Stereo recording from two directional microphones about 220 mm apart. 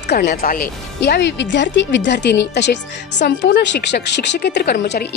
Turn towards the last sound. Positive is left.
turn(degrees=50)  # may be behind; listen again after turning